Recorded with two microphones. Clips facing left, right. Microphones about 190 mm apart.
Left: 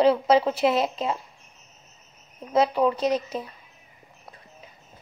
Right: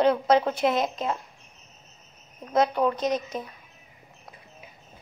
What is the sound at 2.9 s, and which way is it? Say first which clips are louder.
Speech: left 2 dB; 30° left (ahead or behind).